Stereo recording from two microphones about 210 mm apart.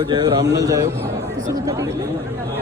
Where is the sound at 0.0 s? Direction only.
20° right (ahead or behind).